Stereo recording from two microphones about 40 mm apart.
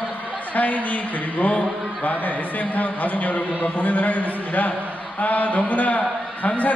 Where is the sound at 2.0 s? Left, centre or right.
Left.